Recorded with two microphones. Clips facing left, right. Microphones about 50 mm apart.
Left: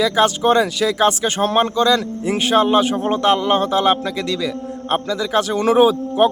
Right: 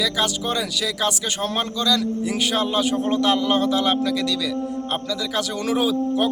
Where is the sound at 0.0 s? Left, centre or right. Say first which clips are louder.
Left 8 dB; left.